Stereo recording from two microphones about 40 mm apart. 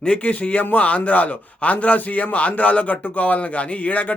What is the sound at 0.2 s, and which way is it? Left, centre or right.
Speech, left.